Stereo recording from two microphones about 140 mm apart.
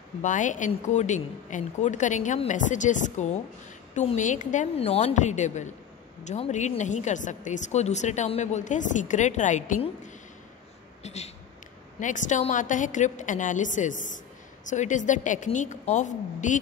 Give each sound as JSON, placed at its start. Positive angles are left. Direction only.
{"t": 0.2, "sound": "speech", "side_deg": 65}
{"t": 4.7, "sound": "speech", "side_deg": 45}
{"t": 12.0, "sound": "speech", "side_deg": 65}